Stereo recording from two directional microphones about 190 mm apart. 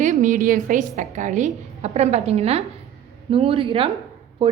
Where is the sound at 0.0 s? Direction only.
40° right (ahead or behind).